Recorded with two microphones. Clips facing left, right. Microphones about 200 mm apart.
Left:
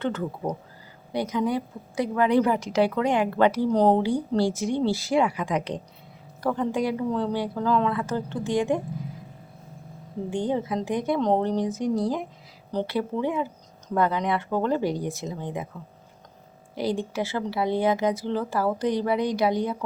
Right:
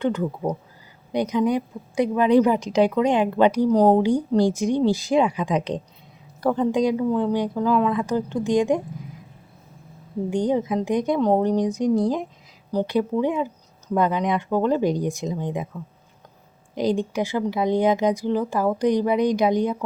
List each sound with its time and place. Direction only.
0.0 s a woman's voice: 15° right (ahead or behind)
10.3 s a woman's voice: 15° right (ahead or behind)
16.7 s a woman's voice: 20° right (ahead or behind)